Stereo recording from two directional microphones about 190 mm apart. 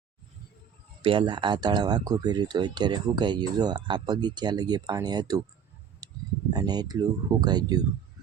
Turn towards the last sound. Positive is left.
turn(degrees=-20)  # may be behind; listen again after turning